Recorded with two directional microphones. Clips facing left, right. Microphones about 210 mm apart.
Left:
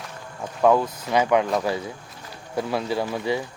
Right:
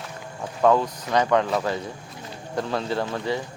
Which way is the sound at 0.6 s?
10° left (ahead or behind).